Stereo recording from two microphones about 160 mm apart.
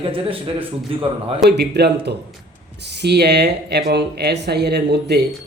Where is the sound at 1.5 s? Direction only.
90° right.